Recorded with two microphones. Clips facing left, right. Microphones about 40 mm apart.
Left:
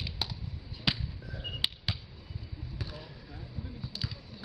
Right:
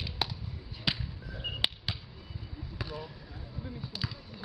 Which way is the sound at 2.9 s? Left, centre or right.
Centre.